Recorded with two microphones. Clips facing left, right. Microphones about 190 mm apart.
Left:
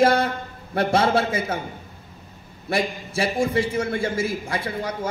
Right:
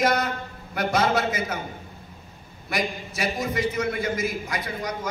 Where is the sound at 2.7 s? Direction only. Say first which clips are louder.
Left 4 dB; 30° left (ahead or behind).